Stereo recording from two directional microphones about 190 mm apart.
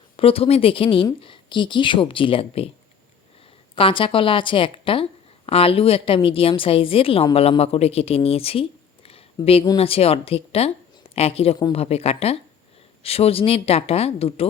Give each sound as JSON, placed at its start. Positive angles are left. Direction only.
{"t": 0.2, "sound": "speech", "side_deg": 30}
{"t": 3.8, "sound": "speech", "side_deg": 25}